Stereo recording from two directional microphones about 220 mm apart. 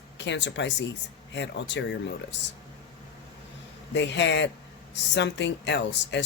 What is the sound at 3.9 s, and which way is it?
Speech, 55° left (ahead or behind).